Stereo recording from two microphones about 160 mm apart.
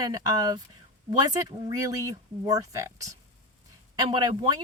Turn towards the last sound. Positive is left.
turn(degrees=-25)  # may be behind; listen again after turning